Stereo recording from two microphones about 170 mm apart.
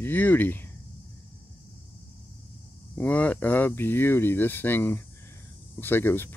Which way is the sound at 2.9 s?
10° left (ahead or behind).